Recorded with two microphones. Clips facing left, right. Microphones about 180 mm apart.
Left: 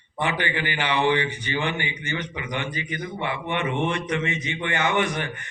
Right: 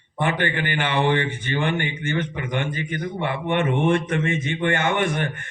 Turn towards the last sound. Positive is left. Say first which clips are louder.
# right 2 dB
turn(degrees=-50)  # may be behind; listen again after turning